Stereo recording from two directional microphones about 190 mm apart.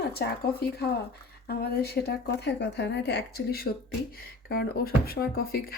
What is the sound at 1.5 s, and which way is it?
Speech, 55° left (ahead or behind).